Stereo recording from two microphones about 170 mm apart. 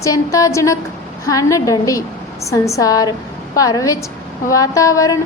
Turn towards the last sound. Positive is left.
turn(degrees=20)  # may be behind; listen again after turning